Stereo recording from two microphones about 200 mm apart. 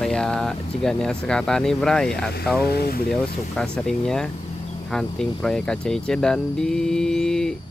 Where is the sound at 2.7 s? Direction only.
50° left (ahead or behind).